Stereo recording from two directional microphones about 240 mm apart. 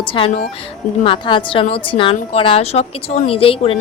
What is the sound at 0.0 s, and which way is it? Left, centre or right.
A woman's voice, left.